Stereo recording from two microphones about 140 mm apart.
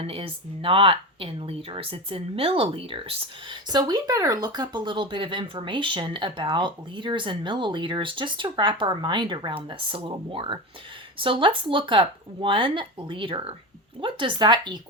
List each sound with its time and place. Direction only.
0.0 s speech: 40° right (ahead or behind)